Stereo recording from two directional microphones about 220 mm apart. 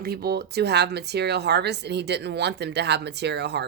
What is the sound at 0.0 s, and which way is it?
Speech, 45° right (ahead or behind).